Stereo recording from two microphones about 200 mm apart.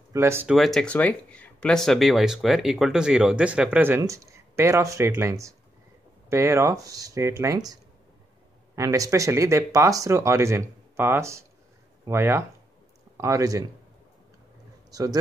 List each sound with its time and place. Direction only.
0.1 s speech: 10° right (ahead or behind)
0.6 s speech: centre (ahead or behind); by 13.7 s 15° right (ahead or behind)
14.9 s speech: 20° right (ahead or behind)